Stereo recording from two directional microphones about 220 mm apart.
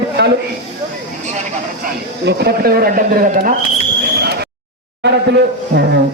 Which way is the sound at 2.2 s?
45° right (ahead or behind).